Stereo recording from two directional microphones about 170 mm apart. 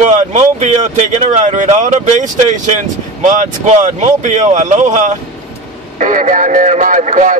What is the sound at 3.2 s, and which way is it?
Speech, 50° right (ahead or behind).